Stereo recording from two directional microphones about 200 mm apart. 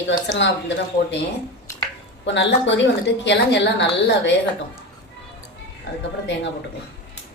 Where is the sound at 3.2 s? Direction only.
60° left (ahead or behind).